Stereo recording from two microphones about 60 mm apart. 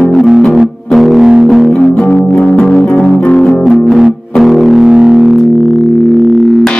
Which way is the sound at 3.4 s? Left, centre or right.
Centre.